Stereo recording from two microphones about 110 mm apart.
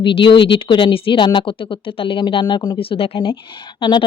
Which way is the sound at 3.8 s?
45° left (ahead or behind).